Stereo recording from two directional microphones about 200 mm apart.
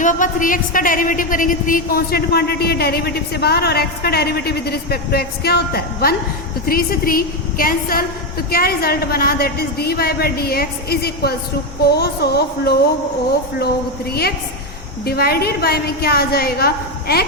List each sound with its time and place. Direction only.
0.0 s a woman's voice: 40° left (ahead or behind)
14.1 s a woman's voice: 50° left (ahead or behind)